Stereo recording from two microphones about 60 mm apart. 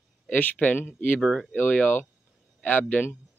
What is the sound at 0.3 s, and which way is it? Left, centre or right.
Speech, left.